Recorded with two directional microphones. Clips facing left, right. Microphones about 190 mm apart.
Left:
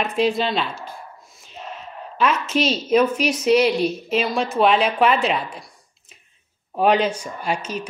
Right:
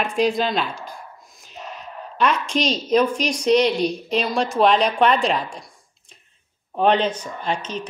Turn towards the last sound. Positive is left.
turn(degrees=10)  # may be behind; listen again after turning